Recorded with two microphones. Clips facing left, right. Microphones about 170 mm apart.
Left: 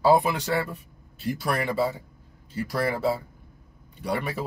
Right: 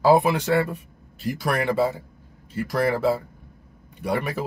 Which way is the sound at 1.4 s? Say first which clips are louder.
Right 4 dB; 55° right (ahead or behind).